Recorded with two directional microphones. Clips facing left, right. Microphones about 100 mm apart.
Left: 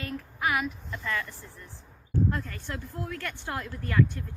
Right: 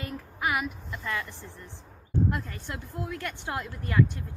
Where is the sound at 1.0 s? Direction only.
25° right (ahead or behind).